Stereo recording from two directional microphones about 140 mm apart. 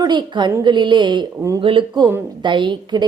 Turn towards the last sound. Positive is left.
turn(degrees=-30)  # may be behind; listen again after turning